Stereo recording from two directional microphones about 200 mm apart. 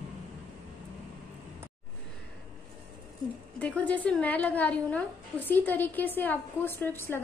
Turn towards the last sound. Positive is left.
turn(degrees=10)  # may be behind; listen again after turning